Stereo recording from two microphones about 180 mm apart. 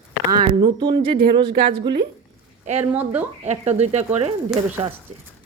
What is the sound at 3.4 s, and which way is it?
Speech, 40° right (ahead or behind).